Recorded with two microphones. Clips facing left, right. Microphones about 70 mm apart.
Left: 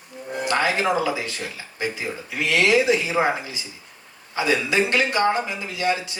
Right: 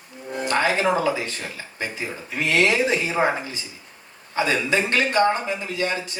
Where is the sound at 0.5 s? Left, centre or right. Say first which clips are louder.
Right 1 dB; right.